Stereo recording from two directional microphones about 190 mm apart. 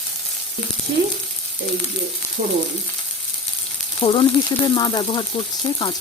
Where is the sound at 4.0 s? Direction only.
25° left (ahead or behind).